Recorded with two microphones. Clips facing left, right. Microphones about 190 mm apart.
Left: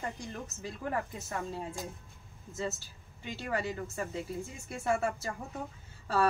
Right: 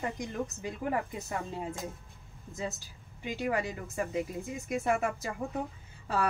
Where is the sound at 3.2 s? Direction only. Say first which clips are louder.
Right 4 dB; 15° right (ahead or behind).